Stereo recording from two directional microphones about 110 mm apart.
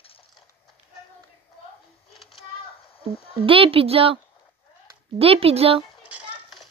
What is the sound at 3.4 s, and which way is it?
Speech, 55° right (ahead or behind).